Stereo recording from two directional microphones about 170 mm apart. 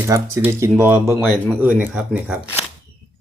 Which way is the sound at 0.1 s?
15° right (ahead or behind).